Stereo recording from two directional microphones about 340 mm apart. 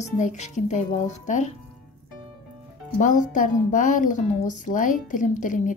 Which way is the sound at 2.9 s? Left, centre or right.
Left.